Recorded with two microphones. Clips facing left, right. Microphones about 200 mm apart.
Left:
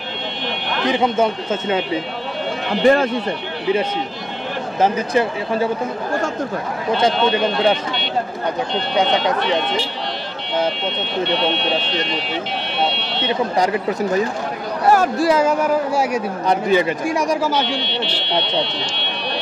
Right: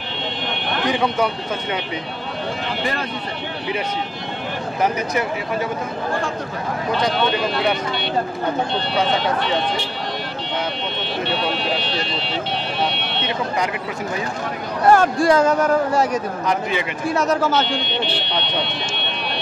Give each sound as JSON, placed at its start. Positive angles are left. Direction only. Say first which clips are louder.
{"t": 0.8, "sound": "speech", "louder": "left 3 dB", "side_deg": 25}
{"t": 2.8, "sound": "speech", "louder": "left 14 dB", "side_deg": 50}
{"t": 4.7, "sound": "speech", "louder": "left 4 dB", "side_deg": 30}
{"t": 8.9, "sound": "speech", "louder": "left 3 dB", "side_deg": 15}
{"t": 13.3, "sound": "speech", "louder": "left 5 dB", "side_deg": 35}
{"t": 14.9, "sound": "speech", "louder": "right 1 dB", "side_deg": 5}
{"t": 16.4, "sound": "speech", "louder": "left 8 dB", "side_deg": 40}
{"t": 17.0, "sound": "speech", "louder": "even", "side_deg": 10}